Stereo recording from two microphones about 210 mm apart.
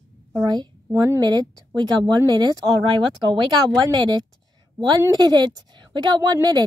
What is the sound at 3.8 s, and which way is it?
Speech, 20° right (ahead or behind).